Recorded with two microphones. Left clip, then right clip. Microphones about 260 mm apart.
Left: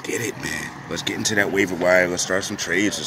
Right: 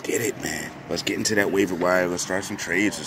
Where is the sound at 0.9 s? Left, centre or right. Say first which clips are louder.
Even; left.